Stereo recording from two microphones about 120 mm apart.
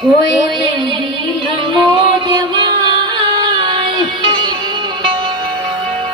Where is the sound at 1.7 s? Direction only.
40° right (ahead or behind).